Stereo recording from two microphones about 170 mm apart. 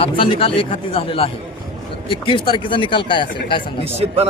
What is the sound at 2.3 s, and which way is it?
Speech, 30° left (ahead or behind).